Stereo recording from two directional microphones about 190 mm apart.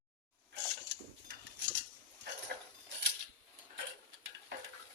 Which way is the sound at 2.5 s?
55° right (ahead or behind).